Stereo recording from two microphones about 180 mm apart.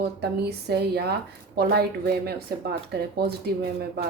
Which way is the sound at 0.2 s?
65° right (ahead or behind).